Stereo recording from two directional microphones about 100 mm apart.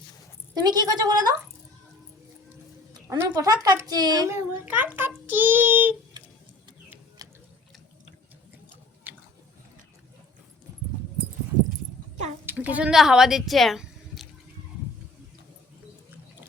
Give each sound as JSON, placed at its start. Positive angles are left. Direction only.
{"t": 0.5, "sound": "speech", "side_deg": -40}
{"t": 3.2, "sound": "speech", "side_deg": -35}
{"t": 4.3, "sound": "child singing", "side_deg": -25}
{"t": 7.2, "sound": "tick-tock", "side_deg": -40}
{"t": 9.1, "sound": "a sound", "side_deg": -20}
{"t": 12.5, "sound": "a woman's voice", "side_deg": -15}
{"t": 12.9, "sound": "a woman's voice", "side_deg": -5}